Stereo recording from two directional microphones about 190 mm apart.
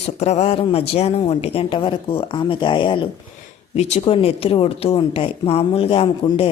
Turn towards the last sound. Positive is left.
turn(degrees=30)  # may be behind; listen again after turning